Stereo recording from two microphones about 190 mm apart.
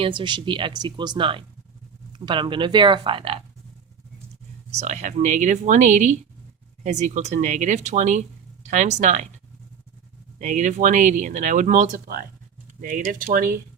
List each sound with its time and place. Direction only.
0.0 s speech: 25° right (ahead or behind)
4.7 s speech: 35° right (ahead or behind)
10.3 s speech: 40° right (ahead or behind)